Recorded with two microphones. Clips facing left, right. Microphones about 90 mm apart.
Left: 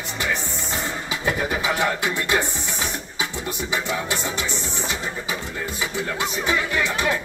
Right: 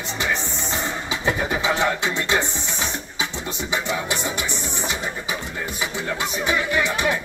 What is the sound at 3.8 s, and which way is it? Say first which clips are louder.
Music: right 1 dB; 20° right (ahead or behind).